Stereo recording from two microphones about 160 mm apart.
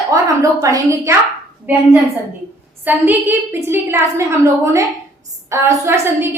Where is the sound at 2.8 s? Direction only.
10° right (ahead or behind).